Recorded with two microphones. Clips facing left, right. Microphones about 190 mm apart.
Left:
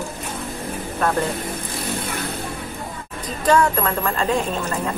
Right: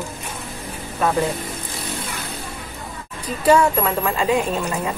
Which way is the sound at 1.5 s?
55° left (ahead or behind).